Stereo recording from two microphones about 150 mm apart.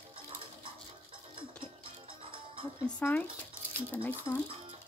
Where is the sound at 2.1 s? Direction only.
35° right (ahead or behind).